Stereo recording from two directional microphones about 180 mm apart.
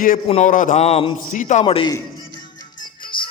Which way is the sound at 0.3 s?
40° left (ahead or behind).